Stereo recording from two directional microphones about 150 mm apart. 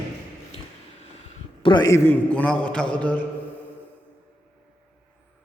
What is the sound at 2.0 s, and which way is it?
A man's voice, 10° left (ahead or behind).